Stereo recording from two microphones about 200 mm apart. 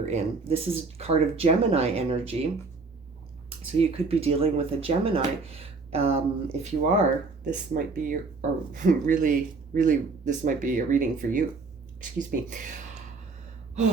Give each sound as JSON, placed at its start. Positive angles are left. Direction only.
{"t": 0.0, "sound": "speech", "side_deg": -30}
{"t": 3.8, "sound": "speech", "side_deg": -30}
{"t": 12.5, "sound": "speech", "side_deg": -40}